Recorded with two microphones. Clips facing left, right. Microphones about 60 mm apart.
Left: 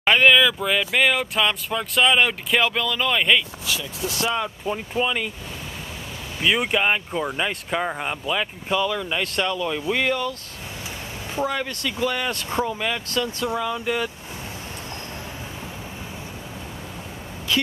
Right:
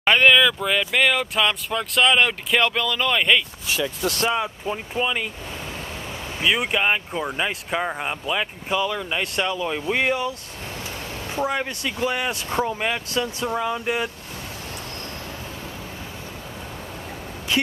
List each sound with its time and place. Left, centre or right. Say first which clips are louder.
0.0 s speech: even; centre
3.8 s speech: right 5 dB; right
4.3 s speech: right 1 dB; centre
6.4 s speech: left 1 dB; centre
11.4 s speech: right 1 dB; centre
12.6 s speech: right 1 dB; centre